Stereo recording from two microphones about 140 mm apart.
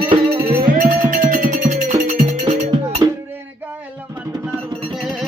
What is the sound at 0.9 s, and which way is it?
Music, 70° right (ahead or behind).